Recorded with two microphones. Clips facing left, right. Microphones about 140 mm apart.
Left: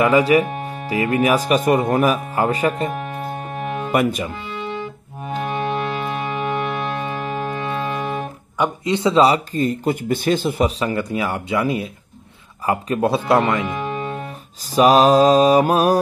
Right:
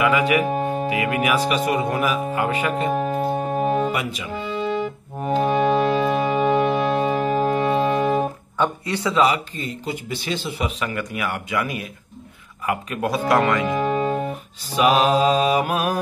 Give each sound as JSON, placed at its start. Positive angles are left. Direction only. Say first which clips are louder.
{"t": 0.0, "sound": "mantra", "louder": "left 4 dB", "side_deg": 35}
{"t": 0.5, "sound": "music", "louder": "right 6 dB", "side_deg": -35}
{"t": 0.8, "sound": "speech", "louder": "left 8 dB", "side_deg": 35}
{"t": 2.3, "sound": "mantra", "louder": "left 3 dB", "side_deg": 35}
{"t": 2.9, "sound": "music", "louder": "right 5 dB", "side_deg": -35}
{"t": 3.9, "sound": "speech", "louder": "left 8 dB", "side_deg": 50}
{"t": 4.6, "sound": "music", "louder": "right 4 dB", "side_deg": -40}
{"t": 8.5, "sound": "speech", "louder": "left 3 dB", "side_deg": 20}
{"t": 10.8, "sound": "speech", "louder": "left 5 dB", "side_deg": 30}
{"t": 13.7, "sound": "music", "louder": "right 4 dB", "side_deg": -40}
{"t": 14.7, "sound": "mantra", "louder": "left 5 dB", "side_deg": 40}